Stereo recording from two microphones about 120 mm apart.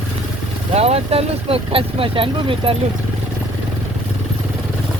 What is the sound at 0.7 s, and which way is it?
Speech, 60° right (ahead or behind).